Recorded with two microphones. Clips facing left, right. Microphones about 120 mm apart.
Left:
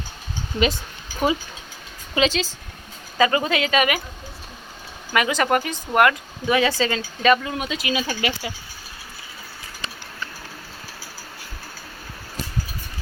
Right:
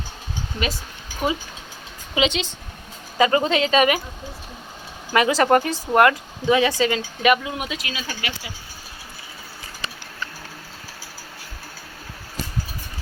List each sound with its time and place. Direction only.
0.5 s speech: centre (ahead or behind)
2.1 s speech: 20° right (ahead or behind)
5.1 s speech: 30° right (ahead or behind); by 7.8 s 10° right (ahead or behind)
7.9 s speech: 20° left (ahead or behind)